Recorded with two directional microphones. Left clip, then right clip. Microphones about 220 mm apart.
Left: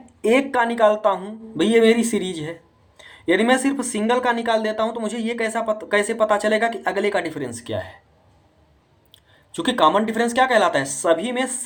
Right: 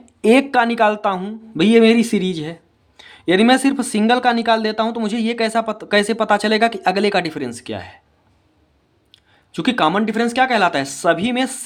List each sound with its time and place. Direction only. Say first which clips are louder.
0.3 s speech: right 4 dB; 45° right (ahead or behind)
9.6 s speech: even; 35° right (ahead or behind)